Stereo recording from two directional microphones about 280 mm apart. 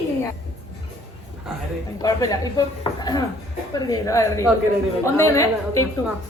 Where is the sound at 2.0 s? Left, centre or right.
Centre.